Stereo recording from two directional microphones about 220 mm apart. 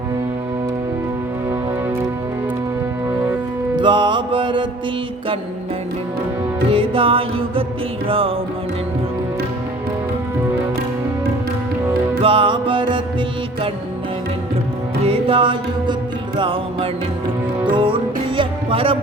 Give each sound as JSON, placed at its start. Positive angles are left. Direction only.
{"t": 3.8, "sound": "music", "side_deg": -20}
{"t": 6.7, "sound": "music", "side_deg": -25}
{"t": 12.2, "sound": "music", "side_deg": -25}
{"t": 15.0, "sound": "music", "side_deg": -25}